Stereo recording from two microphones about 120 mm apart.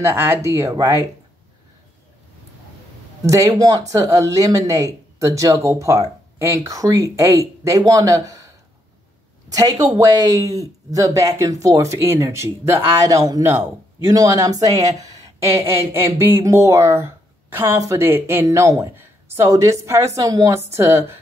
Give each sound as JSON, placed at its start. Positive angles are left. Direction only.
{"t": 0.0, "sound": "speech", "side_deg": -20}
{"t": 3.3, "sound": "speech", "side_deg": -25}
{"t": 9.5, "sound": "speech", "side_deg": -30}